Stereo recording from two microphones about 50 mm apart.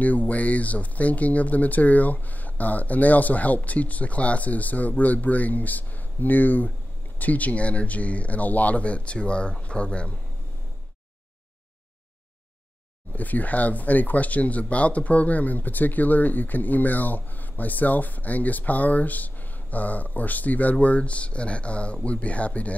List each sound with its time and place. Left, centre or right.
0.0 s speech: left
13.1 s speech: left